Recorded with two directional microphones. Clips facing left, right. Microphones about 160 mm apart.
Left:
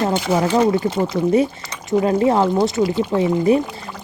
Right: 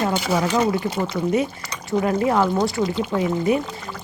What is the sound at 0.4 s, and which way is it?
A woman's voice, 25° left (ahead or behind).